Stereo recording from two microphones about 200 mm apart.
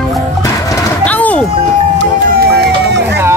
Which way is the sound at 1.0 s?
5° left (ahead or behind).